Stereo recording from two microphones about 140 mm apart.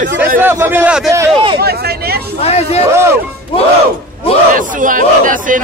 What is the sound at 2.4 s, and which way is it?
Speech, 45° left (ahead or behind).